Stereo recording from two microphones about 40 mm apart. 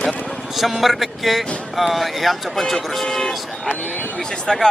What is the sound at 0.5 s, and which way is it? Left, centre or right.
Speech, centre.